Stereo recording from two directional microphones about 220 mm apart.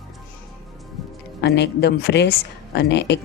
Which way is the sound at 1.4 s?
50° left (ahead or behind).